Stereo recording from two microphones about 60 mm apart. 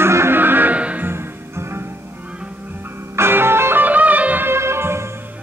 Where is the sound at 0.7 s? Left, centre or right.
Right.